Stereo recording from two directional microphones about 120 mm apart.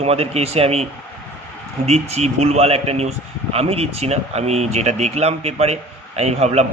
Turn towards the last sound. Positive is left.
turn(degrees=-65)  # may be behind; listen again after turning